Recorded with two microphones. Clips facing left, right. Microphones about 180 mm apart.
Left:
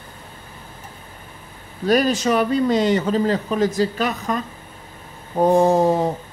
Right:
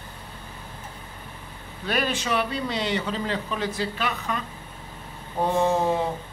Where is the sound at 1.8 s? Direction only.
40° left (ahead or behind).